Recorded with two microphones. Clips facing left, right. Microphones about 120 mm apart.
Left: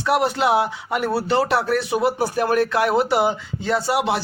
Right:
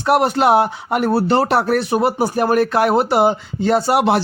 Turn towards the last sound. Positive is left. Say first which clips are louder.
# right 5 dB
turn(degrees=-55)  # may be behind; listen again after turning